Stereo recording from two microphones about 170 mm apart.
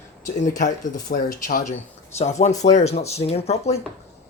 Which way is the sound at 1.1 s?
55° left (ahead or behind).